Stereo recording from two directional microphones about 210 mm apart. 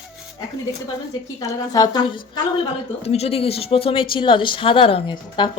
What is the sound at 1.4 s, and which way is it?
A woman's voice, 15° left (ahead or behind).